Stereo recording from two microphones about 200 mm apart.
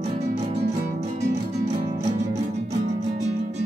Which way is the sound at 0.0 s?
35° right (ahead or behind).